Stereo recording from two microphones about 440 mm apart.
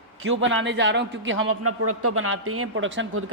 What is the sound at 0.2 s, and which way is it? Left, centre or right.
A man's voice, right.